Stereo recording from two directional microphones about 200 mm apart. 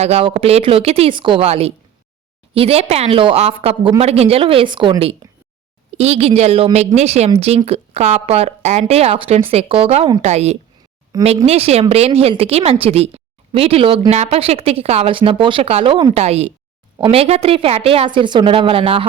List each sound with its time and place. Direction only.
0.0 s a woman's voice: 30° right (ahead or behind)